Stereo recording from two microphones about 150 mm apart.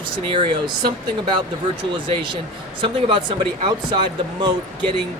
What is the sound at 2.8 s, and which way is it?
Speech, 35° right (ahead or behind).